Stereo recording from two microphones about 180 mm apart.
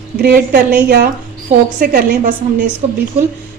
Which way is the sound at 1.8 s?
45° right (ahead or behind).